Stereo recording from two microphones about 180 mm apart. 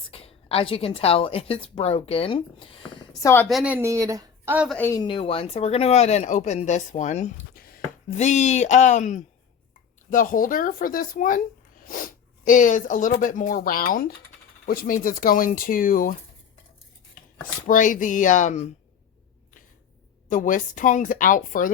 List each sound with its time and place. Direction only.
0.1 s a woman's voice: 30° left (ahead or behind)
3.5 s speech: 5° right (ahead or behind)
4.5 s a woman's voice: 5° right (ahead or behind)
4.8 s speech: 15° left (ahead or behind)
5.0 s a woman's voice: 30° left (ahead or behind)
7.5 s chopping: 55° left (ahead or behind)
8.1 s a woman's voice: 40° left (ahead or behind)
17.7 s speech: 45° left (ahead or behind)
20.2 s speech: 45° left (ahead or behind)